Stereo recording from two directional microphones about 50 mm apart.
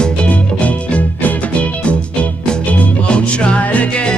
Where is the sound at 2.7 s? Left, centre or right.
Left.